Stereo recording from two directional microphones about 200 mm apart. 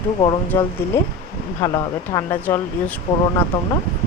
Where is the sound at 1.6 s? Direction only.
20° left (ahead or behind).